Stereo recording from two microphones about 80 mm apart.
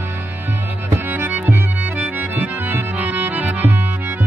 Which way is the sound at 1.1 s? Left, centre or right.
Right.